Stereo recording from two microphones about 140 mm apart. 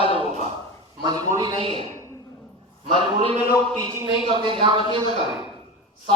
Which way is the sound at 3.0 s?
35° right (ahead or behind).